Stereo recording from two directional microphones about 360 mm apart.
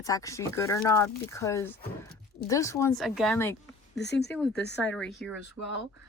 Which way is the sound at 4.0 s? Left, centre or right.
Left.